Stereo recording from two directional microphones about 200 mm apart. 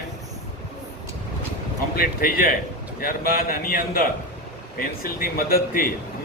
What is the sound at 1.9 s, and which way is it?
A man's voice, 50° left (ahead or behind).